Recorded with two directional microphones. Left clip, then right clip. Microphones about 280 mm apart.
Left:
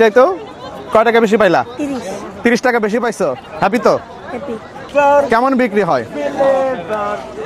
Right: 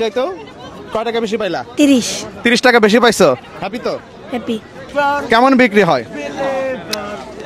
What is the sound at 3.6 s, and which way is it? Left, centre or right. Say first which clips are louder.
Speech: left 9 dB; left.